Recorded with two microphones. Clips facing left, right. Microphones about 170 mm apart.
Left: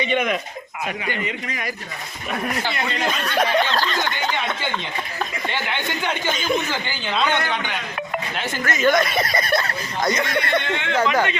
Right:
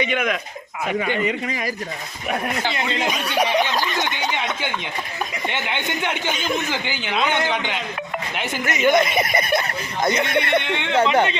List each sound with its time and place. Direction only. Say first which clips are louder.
2.6 s speech: right 1 dB; 15° right (ahead or behind)